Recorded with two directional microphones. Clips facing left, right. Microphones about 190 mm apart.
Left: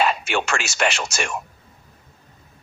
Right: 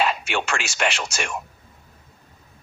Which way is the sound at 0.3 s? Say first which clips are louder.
Left 2 dB; 45° left (ahead or behind).